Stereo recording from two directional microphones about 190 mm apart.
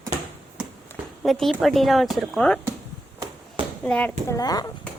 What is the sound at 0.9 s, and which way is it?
Speech, centre (ahead or behind).